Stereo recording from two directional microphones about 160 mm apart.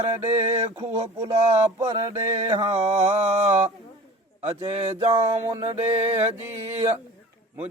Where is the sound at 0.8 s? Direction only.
30° right (ahead or behind).